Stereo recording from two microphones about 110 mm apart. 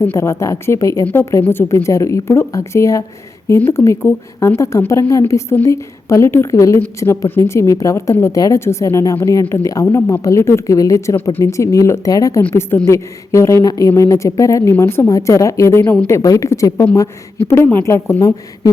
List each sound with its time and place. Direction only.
0.0 s a woman's voice: 25° left (ahead or behind)